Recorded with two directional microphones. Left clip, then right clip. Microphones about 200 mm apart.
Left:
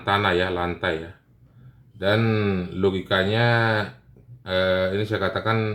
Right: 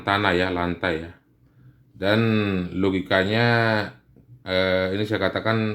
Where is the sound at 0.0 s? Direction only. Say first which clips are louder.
Even; 40° right (ahead or behind).